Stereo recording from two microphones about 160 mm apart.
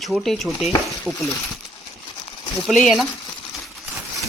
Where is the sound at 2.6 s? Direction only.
Centre (ahead or behind).